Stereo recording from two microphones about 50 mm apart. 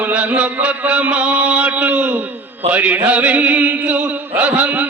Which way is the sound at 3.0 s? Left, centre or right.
Right.